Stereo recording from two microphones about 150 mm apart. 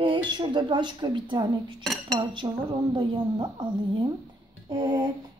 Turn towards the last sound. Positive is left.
turn(degrees=-30)  # may be behind; listen again after turning